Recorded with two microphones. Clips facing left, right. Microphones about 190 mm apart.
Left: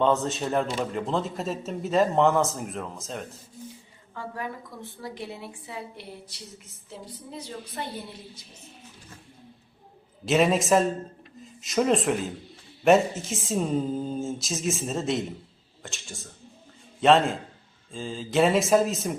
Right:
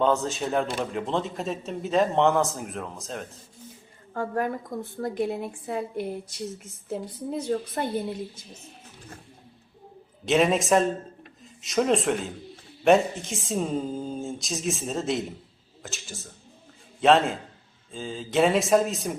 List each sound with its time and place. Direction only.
0.0 s a man's voice: centre (ahead or behind)
4.1 s a woman's voice: 50° right (ahead or behind)
10.2 s a man's voice: centre (ahead or behind)